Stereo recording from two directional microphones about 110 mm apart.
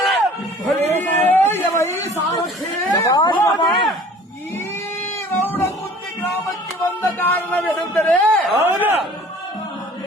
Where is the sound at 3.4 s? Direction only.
35° left (ahead or behind).